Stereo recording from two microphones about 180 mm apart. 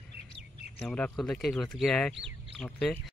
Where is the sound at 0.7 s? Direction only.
10° left (ahead or behind).